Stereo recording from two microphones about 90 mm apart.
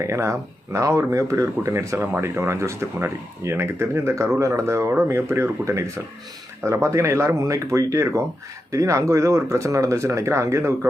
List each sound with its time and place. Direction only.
0.0 s speech: 35° right (ahead or behind)